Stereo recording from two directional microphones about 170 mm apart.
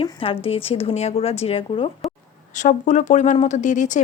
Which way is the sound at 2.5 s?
45° left (ahead or behind).